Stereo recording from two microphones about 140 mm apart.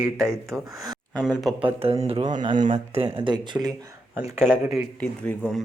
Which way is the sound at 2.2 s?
35° right (ahead or behind).